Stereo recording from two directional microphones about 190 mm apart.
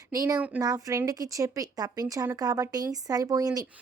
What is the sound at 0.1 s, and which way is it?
Speech, 15° right (ahead or behind).